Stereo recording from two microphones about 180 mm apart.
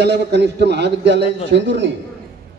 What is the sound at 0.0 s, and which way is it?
Speech, 70° right (ahead or behind).